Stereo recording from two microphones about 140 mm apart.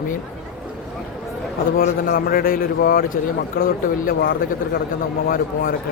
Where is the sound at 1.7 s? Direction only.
90° left.